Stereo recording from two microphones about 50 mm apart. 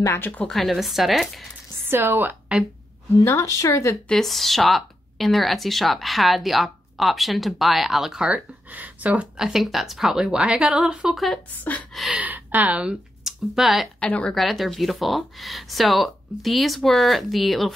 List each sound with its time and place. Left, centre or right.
0.2 s speech: left
0.5 s speech: centre
1.9 s a woman's voice: right
3.3 s speech: left
4.2 s speech: centre
8.3 s speech: right
9.4 s speech: centre
10.3 s a woman's voice: centre
11.5 s speech: left
12.2 s a woman's voice: right
13.2 s speech: centre
13.9 s speech: left
14.3 s speech: centre